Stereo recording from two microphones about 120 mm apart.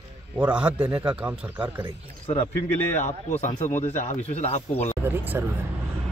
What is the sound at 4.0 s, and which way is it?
Speech, 75° left (ahead or behind).